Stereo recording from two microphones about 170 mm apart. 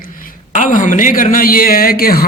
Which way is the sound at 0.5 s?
50° left (ahead or behind).